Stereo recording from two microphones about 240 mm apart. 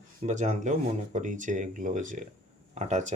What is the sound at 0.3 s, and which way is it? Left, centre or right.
Speech, right.